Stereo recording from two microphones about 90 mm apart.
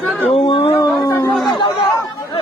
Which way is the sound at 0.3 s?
80° left.